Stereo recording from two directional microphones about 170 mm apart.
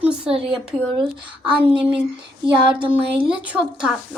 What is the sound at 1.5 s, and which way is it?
Speech, 30° right (ahead or behind).